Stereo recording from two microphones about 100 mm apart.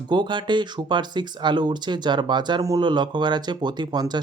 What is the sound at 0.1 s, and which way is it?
Speech, 50° right (ahead or behind).